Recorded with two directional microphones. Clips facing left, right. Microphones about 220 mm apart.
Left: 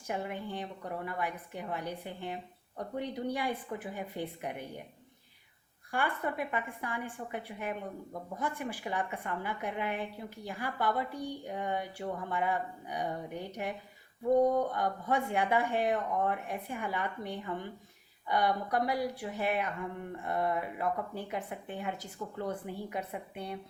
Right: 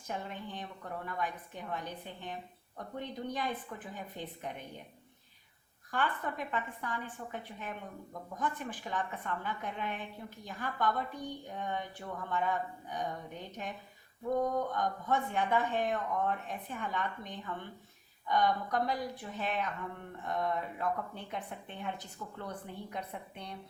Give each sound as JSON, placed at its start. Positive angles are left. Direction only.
{"t": 0.1, "sound": "a woman's voice", "side_deg": 10}
{"t": 5.9, "sound": "a woman's voice", "side_deg": 10}